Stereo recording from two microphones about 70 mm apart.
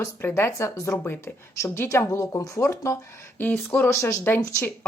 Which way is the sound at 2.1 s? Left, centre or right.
Left.